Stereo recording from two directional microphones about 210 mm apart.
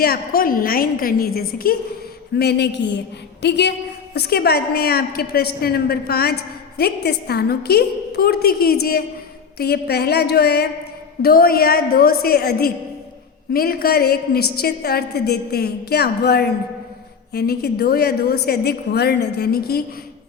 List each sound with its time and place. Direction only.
0.0 s a woman's voice: 45° left (ahead or behind)